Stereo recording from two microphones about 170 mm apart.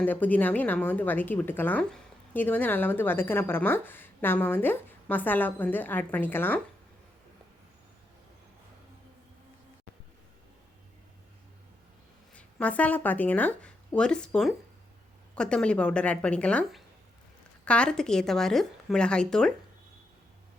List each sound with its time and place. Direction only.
0.0 s a woman's voice: 10° left (ahead or behind)
12.3 s a woman's voice: 5° left (ahead or behind)